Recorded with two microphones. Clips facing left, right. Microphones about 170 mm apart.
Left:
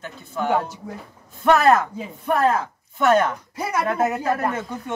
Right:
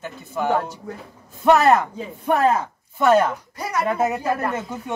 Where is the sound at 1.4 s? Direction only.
15° right (ahead or behind).